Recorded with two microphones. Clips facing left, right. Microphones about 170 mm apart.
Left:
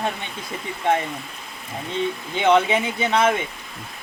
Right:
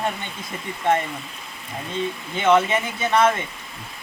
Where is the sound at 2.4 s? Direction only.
15° left (ahead or behind).